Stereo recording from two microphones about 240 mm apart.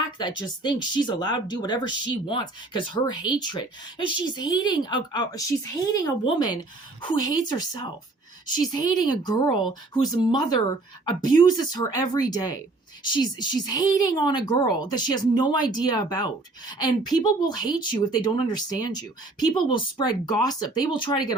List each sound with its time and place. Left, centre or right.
0.2 s a woman's voice: centre